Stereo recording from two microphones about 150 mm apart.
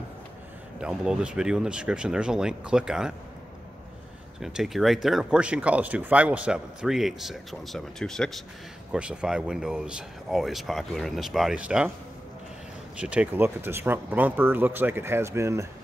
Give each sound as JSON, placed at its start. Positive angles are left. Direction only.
{"t": 0.7, "sound": "speech", "side_deg": -5}
{"t": 4.4, "sound": "speech", "side_deg": 0}
{"t": 13.0, "sound": "speech", "side_deg": -10}